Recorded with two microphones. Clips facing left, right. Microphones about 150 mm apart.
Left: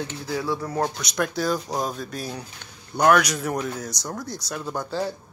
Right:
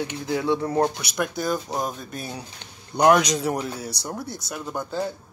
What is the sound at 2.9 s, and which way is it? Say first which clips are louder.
Speech: right 1 dB; 20° right (ahead or behind).